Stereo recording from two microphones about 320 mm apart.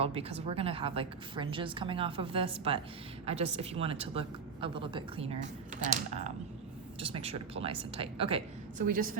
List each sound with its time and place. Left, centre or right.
0.0 s a woman's voice: centre